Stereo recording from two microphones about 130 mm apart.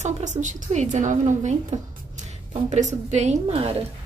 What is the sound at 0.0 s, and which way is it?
A woman's voice, 70° right (ahead or behind).